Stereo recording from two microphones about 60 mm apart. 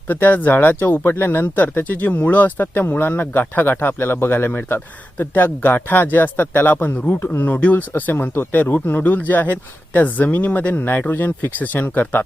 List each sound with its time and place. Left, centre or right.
0.1 s speech: left